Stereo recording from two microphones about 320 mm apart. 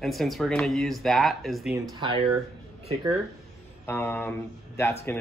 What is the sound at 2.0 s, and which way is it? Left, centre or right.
Speech, centre.